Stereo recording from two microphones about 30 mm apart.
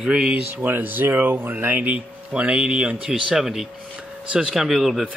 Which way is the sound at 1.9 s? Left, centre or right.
Right.